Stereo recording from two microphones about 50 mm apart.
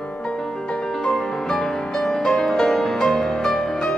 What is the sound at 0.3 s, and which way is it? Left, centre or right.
Music, centre.